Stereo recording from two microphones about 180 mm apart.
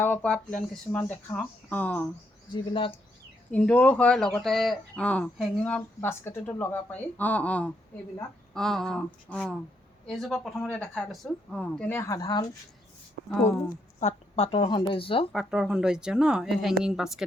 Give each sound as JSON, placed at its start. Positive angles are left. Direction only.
{"t": 0.0, "sound": "speech", "side_deg": 10}
{"t": 2.5, "sound": "speech", "side_deg": 30}
{"t": 3.5, "sound": "speech", "side_deg": 5}
{"t": 13.2, "sound": "speech", "side_deg": -90}
{"t": 14.0, "sound": "speech", "side_deg": 35}
{"t": 15.3, "sound": "speech", "side_deg": -5}